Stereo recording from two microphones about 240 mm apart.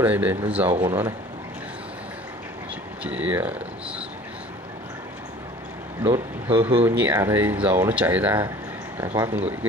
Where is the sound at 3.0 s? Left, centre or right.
Centre.